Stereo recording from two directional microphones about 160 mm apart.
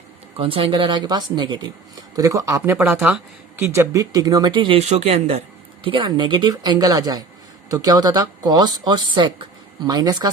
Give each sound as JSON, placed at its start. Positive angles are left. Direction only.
{"t": 0.3, "sound": "speech", "side_deg": -35}
{"t": 5.8, "sound": "speech", "side_deg": -30}